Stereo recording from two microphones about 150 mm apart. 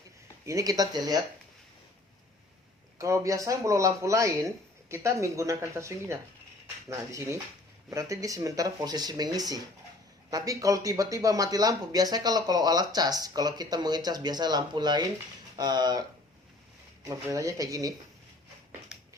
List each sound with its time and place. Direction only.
0.4 s speech: 20° right (ahead or behind)
3.0 s speech: 20° right (ahead or behind)